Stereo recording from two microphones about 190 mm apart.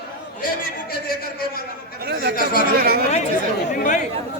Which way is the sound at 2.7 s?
55° right (ahead or behind).